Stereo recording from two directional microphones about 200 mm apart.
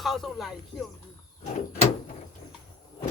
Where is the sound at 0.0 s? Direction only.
Centre (ahead or behind).